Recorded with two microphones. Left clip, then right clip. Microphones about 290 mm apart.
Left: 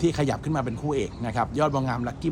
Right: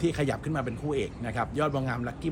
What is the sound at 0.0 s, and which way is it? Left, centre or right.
Speech, centre.